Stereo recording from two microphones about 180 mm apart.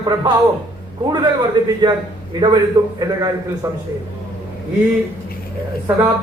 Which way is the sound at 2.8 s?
15° right (ahead or behind).